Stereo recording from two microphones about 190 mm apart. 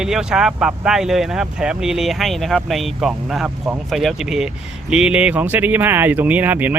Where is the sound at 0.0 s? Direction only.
5° right (ahead or behind).